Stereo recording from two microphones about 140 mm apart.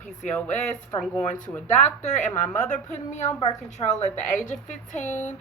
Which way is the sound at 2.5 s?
60° left (ahead or behind).